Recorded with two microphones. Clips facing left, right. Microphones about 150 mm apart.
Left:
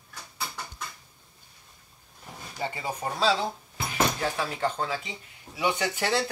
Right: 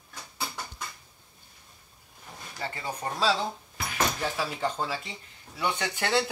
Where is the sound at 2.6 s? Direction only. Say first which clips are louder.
Left 3 dB; 15° left (ahead or behind).